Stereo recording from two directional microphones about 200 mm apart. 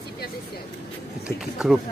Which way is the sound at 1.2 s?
Centre (ahead or behind).